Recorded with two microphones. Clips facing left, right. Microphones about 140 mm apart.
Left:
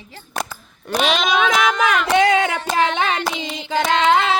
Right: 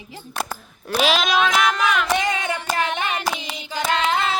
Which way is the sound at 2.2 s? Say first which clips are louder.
Left 8 dB; 90° left.